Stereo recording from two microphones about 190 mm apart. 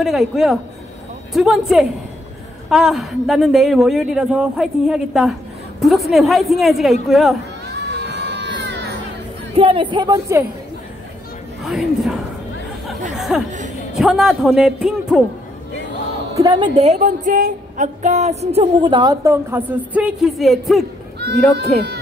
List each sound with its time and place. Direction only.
0.0 s a woman's voice: centre (ahead or behind)
7.7 s baby cry: 60° right (ahead or behind)
9.6 s speech: 25° right (ahead or behind)
11.6 s a woman's voice: centre (ahead or behind)
13.1 s a sound: centre (ahead or behind)
13.9 s a woman's voice: centre (ahead or behind)
16.3 s a woman's voice: 25° right (ahead or behind); by 21.9 s 5° left (ahead or behind)